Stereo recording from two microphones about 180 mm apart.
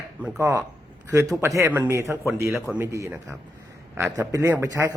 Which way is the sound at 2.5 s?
Centre (ahead or behind).